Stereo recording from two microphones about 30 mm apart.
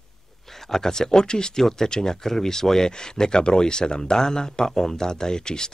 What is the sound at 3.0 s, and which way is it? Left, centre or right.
Speech, left.